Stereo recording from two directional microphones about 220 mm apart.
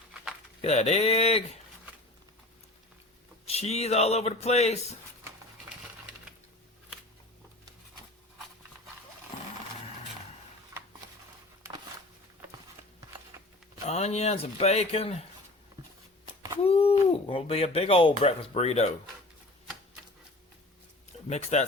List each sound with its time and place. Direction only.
0.6 s speech: 30° left (ahead or behind)
3.4 s speech: 30° left (ahead or behind)
10.7 s a sound: 15° right (ahead or behind)
13.8 s speech: 30° left (ahead or behind)
16.6 s speech: 25° left (ahead or behind)
21.2 s speech: 30° left (ahead or behind)